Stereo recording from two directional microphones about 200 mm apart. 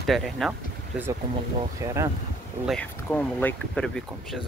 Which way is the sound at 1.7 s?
15° right (ahead or behind).